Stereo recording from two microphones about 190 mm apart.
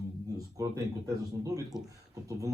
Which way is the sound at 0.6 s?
15° right (ahead or behind).